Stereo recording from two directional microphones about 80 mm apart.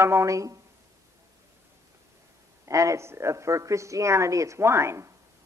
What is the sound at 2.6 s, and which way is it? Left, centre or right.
A woman's voice, right.